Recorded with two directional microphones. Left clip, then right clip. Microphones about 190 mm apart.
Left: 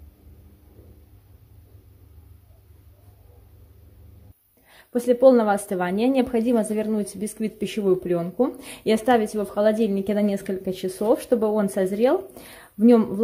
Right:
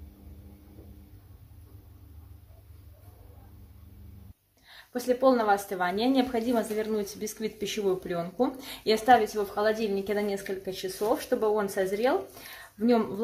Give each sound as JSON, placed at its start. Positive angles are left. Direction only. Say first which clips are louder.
{"t": 4.6, "sound": "a woman's voice", "louder": "left 7 dB", "side_deg": 55}